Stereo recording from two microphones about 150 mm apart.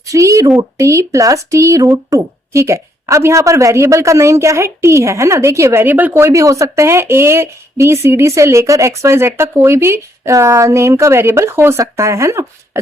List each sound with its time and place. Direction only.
0.1 s a woman's voice: 20° right (ahead or behind)